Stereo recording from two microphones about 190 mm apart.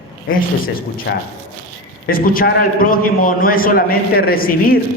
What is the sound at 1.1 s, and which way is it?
Speech, 65° left (ahead or behind).